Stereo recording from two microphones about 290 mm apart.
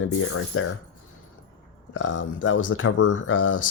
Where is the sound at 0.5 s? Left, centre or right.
Left.